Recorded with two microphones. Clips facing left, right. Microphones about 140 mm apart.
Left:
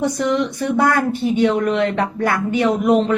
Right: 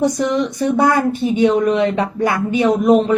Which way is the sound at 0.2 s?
15° right (ahead or behind).